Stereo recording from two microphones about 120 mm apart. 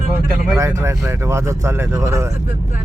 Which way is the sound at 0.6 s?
25° right (ahead or behind).